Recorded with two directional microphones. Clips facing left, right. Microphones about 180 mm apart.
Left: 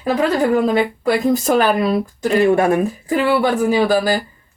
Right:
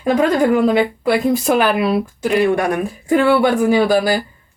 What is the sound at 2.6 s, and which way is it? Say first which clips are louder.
Speech: left 3 dB; 25° left (ahead or behind).